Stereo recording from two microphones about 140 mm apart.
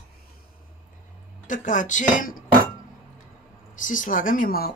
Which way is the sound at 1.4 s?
65° left (ahead or behind).